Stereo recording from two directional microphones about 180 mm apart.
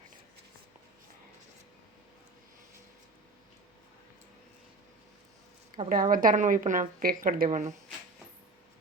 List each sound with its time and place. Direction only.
5.9 s a woman's voice: 50° right (ahead or behind)